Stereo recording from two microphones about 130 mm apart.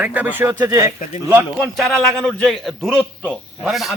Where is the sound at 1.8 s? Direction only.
5° left (ahead or behind).